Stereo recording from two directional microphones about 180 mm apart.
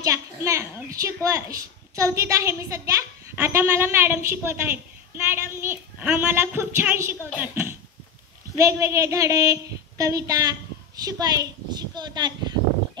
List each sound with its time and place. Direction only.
0.0 s a child's voice: 15° right (ahead or behind)